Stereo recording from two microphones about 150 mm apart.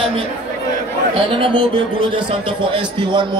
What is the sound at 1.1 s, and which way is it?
A man's voice, 35° right (ahead or behind).